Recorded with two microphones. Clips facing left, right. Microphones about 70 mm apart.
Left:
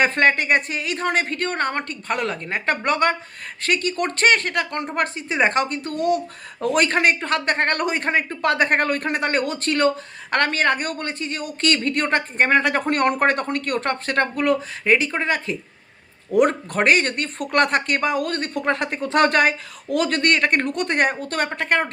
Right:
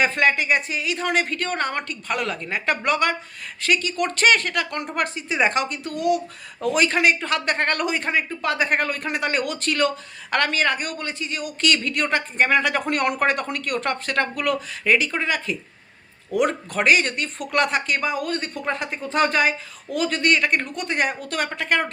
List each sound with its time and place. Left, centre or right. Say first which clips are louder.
0.0 s speech: left 2 dB; left